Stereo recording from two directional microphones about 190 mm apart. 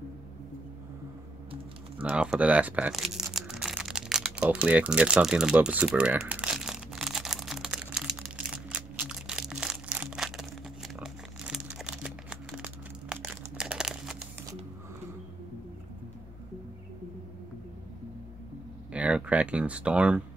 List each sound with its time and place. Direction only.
2.0 s speech: 5° right (ahead or behind)
3.3 s crumpling: centre (ahead or behind)
18.9 s a sound: 5° right (ahead or behind)